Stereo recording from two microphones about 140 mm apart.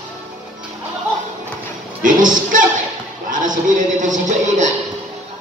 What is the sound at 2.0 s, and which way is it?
Speech, 70° right (ahead or behind).